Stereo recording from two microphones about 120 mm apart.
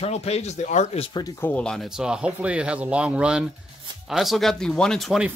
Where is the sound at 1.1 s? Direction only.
35° left (ahead or behind).